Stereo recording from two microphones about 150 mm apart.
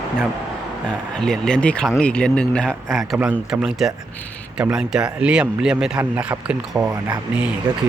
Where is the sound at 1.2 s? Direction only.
5° left (ahead or behind).